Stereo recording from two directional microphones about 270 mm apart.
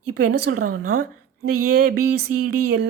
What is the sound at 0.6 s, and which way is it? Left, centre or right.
Speech, right.